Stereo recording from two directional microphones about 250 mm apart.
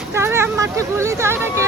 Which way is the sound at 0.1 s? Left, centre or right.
Centre.